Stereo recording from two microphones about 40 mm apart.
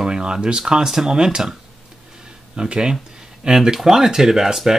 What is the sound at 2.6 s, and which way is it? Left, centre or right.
Speech, right.